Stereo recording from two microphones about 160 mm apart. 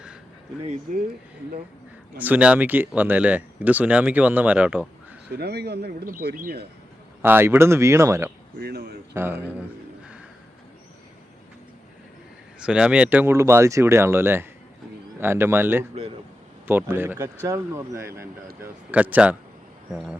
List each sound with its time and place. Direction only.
2.1 s speech: 10° right (ahead or behind)
5.3 s speech: 90° right; by 6.7 s 65° right (ahead or behind)
7.2 s speech: 15° right (ahead or behind)
8.5 s speech: 75° right (ahead or behind)
9.1 s speech: 15° right (ahead or behind)
12.6 s speech: 5° right (ahead or behind)